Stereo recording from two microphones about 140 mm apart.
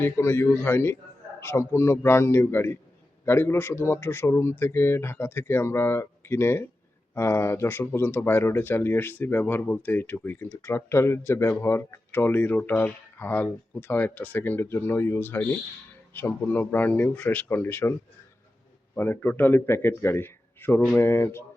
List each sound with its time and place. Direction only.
0.0 s speech: 20° left (ahead or behind)
18.9 s speech: 15° left (ahead or behind)